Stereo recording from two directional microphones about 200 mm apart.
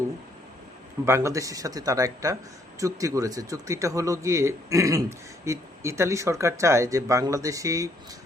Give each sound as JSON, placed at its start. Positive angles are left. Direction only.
{"t": 1.0, "sound": "speech", "side_deg": -15}